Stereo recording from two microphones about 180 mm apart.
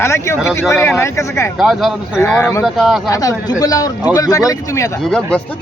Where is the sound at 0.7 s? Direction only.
15° left (ahead or behind).